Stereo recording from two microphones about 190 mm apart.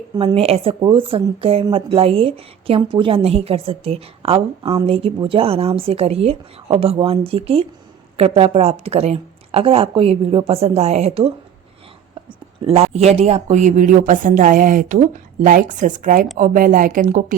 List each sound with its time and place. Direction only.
0.2 s a woman's voice: 30° right (ahead or behind)
12.6 s a woman's voice: 30° right (ahead or behind)